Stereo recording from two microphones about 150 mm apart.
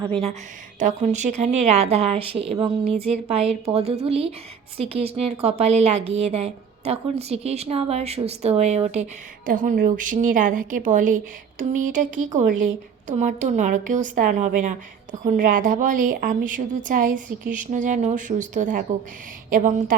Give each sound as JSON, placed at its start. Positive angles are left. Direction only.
{"t": 0.8, "sound": "a woman's voice", "side_deg": -55}
{"t": 9.5, "sound": "a woman's voice", "side_deg": -65}